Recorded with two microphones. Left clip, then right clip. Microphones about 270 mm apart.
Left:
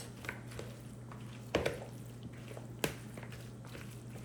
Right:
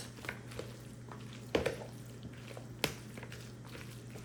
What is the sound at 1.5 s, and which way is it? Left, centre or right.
Chopping, centre.